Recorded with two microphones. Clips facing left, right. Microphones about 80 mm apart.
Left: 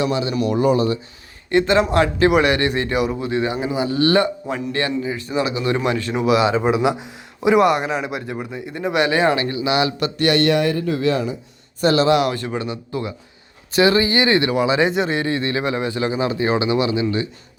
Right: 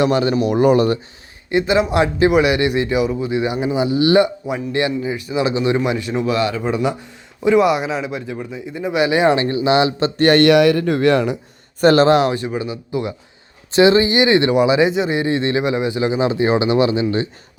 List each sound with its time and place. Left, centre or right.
0.0 s speech: right
1.5 s speech: centre
6.1 s speech: centre
6.4 s speech: left
6.7 s speech: centre
7.6 s speech: centre
9.0 s speech: centre
9.3 s speech: right
10.4 s speech: right
11.8 s speech: right
12.3 s speech: centre
13.7 s speech: right
14.8 s speech: centre
15.3 s speech: right